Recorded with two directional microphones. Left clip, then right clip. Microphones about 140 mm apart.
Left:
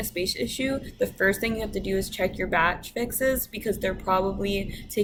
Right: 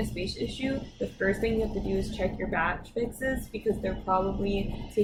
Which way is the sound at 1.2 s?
25° left (ahead or behind).